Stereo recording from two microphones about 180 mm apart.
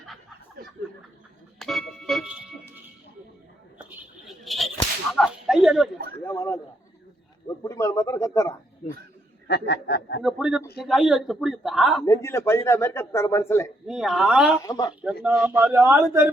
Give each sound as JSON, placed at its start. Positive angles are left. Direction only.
{"t": 1.5, "sound": "organ", "side_deg": 0}
{"t": 4.3, "sound": "a sound", "side_deg": 0}
{"t": 6.2, "sound": "a sound", "side_deg": 15}
{"t": 7.4, "sound": "speech", "side_deg": 15}
{"t": 9.5, "sound": "speech", "side_deg": 65}
{"t": 10.2, "sound": "a man's voice", "side_deg": -5}
{"t": 12.0, "sound": "a man's voice", "side_deg": 15}
{"t": 13.8, "sound": "a man's voice", "side_deg": -5}
{"t": 14.6, "sound": "speech", "side_deg": 20}
{"t": 15.0, "sound": "a man's voice", "side_deg": -10}